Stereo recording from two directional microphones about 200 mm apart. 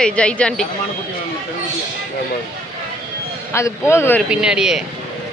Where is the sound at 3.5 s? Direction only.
15° left (ahead or behind).